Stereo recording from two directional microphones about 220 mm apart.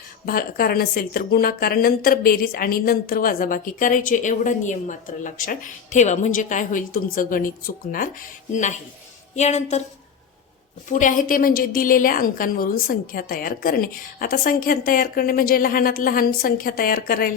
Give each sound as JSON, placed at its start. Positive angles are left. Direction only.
{"t": 0.3, "sound": "a woman's voice", "side_deg": 40}
{"t": 10.8, "sound": "a woman's voice", "side_deg": 35}